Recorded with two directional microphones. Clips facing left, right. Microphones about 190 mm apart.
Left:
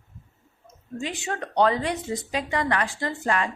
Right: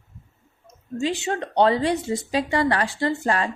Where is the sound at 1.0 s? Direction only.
25° right (ahead or behind).